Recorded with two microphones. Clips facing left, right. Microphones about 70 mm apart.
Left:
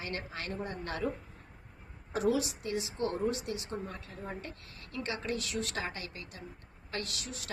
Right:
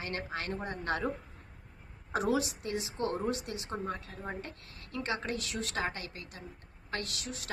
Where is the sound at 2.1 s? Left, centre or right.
Right.